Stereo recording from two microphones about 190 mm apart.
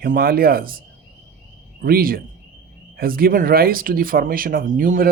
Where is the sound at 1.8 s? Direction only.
50° right (ahead or behind).